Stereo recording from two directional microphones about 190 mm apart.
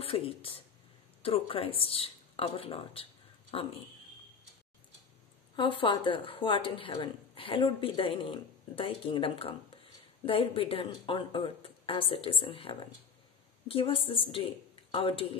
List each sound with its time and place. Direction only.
0.0 s a woman's voice: 30° left (ahead or behind)
5.6 s a woman's voice: 25° left (ahead or behind)